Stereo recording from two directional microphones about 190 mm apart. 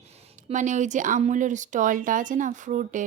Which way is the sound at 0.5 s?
40° right (ahead or behind).